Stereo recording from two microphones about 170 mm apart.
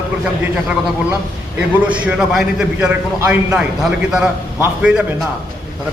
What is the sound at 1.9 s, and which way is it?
A man's voice, 5° right (ahead or behind).